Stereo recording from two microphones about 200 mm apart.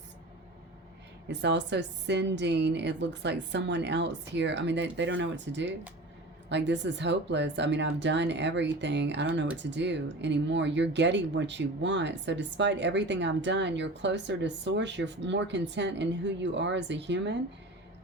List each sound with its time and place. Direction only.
1.3 s speech: 60° right (ahead or behind)